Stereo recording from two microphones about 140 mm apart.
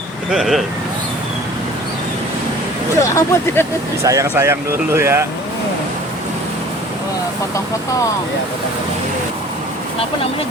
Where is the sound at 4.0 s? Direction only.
20° right (ahead or behind).